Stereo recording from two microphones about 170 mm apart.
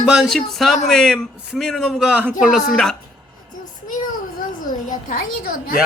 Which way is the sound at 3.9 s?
50° left (ahead or behind).